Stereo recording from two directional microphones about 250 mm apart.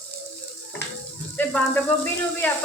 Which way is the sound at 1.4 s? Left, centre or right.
Centre.